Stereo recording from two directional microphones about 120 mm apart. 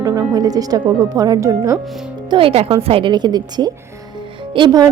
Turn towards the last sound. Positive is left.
turn(degrees=-35)  # may be behind; listen again after turning